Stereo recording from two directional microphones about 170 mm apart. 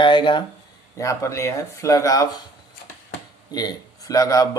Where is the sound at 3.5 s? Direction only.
20° left (ahead or behind).